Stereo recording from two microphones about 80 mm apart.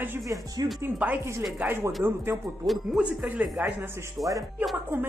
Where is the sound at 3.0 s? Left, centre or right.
Centre.